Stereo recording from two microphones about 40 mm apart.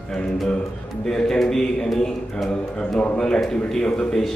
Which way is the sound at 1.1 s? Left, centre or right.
Centre.